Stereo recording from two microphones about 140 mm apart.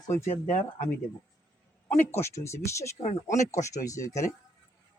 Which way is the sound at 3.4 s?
20° left (ahead or behind).